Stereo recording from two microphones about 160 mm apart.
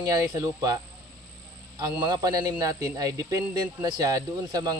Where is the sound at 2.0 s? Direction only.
25° right (ahead or behind).